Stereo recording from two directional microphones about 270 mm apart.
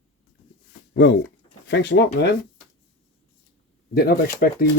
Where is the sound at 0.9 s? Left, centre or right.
Left.